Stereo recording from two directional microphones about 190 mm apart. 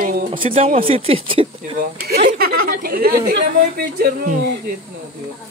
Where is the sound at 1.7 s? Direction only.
55° right (ahead or behind).